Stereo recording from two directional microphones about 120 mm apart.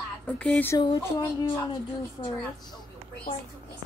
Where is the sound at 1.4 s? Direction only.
45° left (ahead or behind).